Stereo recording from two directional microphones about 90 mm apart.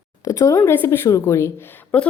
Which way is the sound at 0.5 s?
25° left (ahead or behind).